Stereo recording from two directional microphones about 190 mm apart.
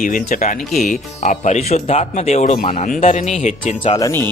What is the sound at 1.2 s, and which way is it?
Speech, 40° left (ahead or behind).